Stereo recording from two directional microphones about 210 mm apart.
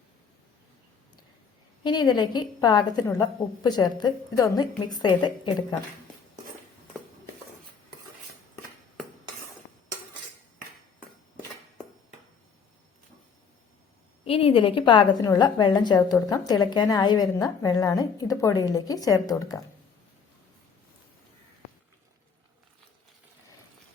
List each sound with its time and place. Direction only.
1.8 s a woman's voice: 20° left (ahead or behind)
14.3 s a woman's voice: 25° left (ahead or behind)